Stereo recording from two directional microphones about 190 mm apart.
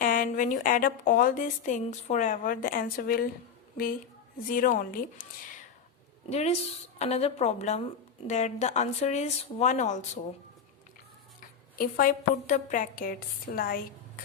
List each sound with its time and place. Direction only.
0.0 s a woman's voice: 45° left (ahead or behind)
4.4 s a woman's voice: 50° left (ahead or behind)
6.3 s speech: 35° left (ahead or behind)
11.3 s a woman's voice: 50° left (ahead or behind)